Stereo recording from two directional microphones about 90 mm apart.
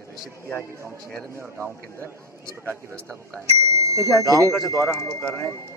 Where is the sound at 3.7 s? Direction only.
35° right (ahead or behind).